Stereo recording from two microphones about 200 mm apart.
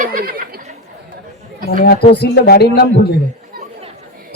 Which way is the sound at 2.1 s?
55° left (ahead or behind).